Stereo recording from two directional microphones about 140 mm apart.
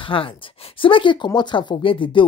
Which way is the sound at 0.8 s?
40° left (ahead or behind).